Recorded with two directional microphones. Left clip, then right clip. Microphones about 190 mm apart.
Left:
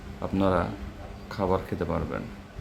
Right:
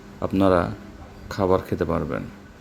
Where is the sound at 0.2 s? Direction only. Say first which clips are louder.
Right 6 dB; 30° right (ahead or behind).